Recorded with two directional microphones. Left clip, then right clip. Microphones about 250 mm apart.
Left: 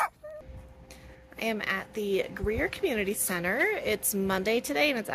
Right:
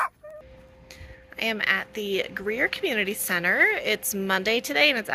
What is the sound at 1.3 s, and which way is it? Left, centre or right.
Speech, centre.